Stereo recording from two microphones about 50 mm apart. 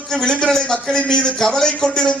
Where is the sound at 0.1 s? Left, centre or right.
Centre.